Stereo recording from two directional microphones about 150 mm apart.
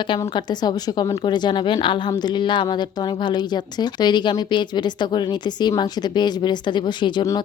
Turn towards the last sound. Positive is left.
turn(degrees=30)  # may be behind; listen again after turning